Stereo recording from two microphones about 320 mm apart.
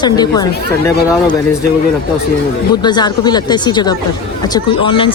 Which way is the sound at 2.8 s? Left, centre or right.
Centre.